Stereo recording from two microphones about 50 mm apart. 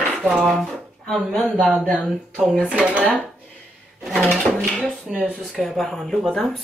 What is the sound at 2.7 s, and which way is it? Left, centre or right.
Speech, right.